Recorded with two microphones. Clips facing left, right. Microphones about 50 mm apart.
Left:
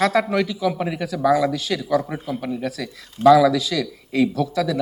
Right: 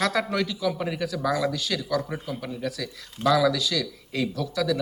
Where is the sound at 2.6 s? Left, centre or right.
Left.